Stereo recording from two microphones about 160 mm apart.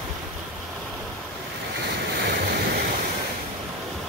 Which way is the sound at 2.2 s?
90° right.